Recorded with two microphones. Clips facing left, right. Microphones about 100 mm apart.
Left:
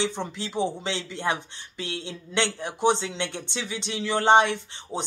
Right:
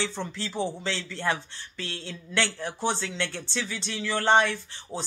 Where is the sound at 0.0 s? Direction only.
20° left (ahead or behind).